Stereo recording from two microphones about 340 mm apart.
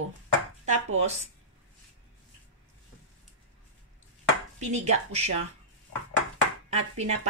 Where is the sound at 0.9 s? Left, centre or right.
Centre.